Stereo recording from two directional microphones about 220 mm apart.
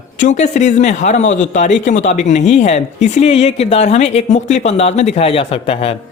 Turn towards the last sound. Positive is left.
turn(degrees=25)  # may be behind; listen again after turning